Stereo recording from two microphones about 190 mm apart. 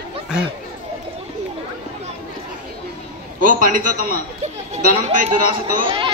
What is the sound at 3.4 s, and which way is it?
A man's voice, 45° right (ahead or behind).